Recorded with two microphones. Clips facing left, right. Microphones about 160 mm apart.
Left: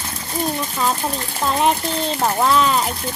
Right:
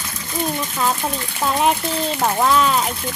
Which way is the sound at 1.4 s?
5° right (ahead or behind).